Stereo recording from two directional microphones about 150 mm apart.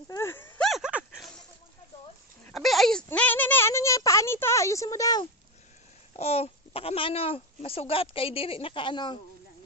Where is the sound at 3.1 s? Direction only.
10° left (ahead or behind).